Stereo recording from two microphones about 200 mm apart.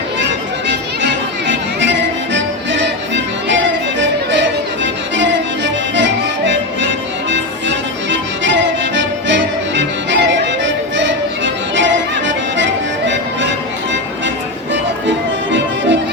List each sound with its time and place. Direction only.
0.2 s music: 65° right (ahead or behind)
14.7 s music: 65° right (ahead or behind)